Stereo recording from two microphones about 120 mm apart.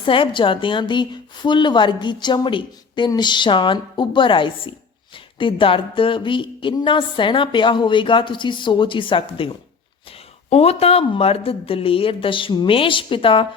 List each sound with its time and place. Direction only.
0.0 s a woman's voice: 45° left (ahead or behind)
10.1 s speech: 55° left (ahead or behind)